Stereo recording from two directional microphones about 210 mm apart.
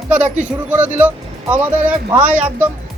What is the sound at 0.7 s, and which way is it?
Speech, 10° right (ahead or behind).